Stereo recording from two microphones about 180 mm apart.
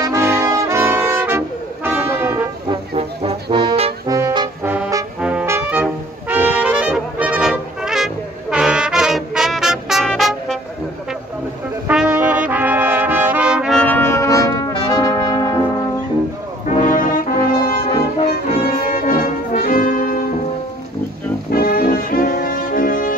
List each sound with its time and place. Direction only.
0.0 s brass instrument: 15° right (ahead or behind)
2.9 s brass instrument: 35° right (ahead or behind)
4.1 s music: 20° right (ahead or behind)
4.6 s brass instrument: 15° right (ahead or behind); by 10.6 s centre (ahead or behind)
11.9 s brass instrument: 5° right (ahead or behind); by 15.6 s 20° left (ahead or behind)
16.9 s brass instrument: 50° left (ahead or behind)
18.9 s brass instrument: 50° left (ahead or behind)
21.5 s brass instrument: 55° left (ahead or behind)